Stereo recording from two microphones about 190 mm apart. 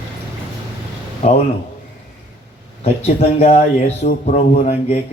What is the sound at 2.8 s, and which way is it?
Speech, 35° left (ahead or behind).